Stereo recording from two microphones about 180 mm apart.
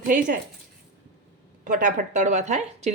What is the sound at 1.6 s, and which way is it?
Speech, 45° right (ahead or behind).